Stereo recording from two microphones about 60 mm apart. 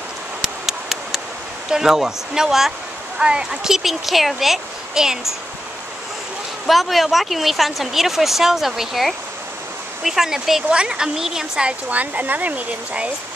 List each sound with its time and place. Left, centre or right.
0.4 s a sound: centre
1.7 s a woman's voice: centre
6.6 s a woman's voice: centre
11.9 s speech: right